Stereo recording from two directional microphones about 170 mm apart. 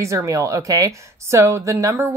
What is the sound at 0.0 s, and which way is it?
A woman's voice, 15° right (ahead or behind).